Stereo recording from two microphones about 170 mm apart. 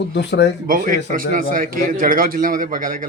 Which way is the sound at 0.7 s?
55° right (ahead or behind).